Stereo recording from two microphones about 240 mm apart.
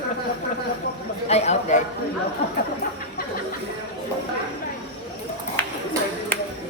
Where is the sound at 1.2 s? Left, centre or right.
Left.